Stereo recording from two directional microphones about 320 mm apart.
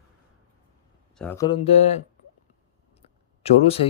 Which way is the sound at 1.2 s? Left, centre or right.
Centre.